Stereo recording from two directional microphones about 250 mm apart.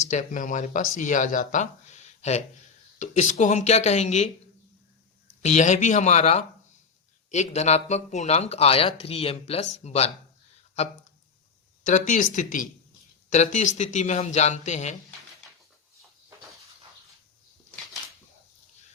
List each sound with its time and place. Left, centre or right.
0.1 s speech: left
5.4 s speech: left
12.1 s speech: left